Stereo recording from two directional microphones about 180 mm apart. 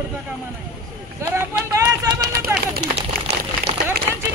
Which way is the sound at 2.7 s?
65° right (ahead or behind).